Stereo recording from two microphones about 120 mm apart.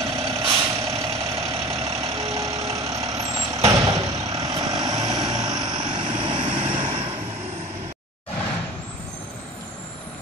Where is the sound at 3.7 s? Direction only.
30° right (ahead or behind); by 7.0 s 45° right (ahead or behind).